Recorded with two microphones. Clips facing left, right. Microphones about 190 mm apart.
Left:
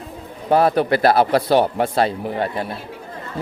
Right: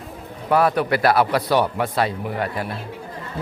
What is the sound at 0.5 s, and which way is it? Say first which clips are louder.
A man's voice: left 3 dB; 30° left (ahead or behind).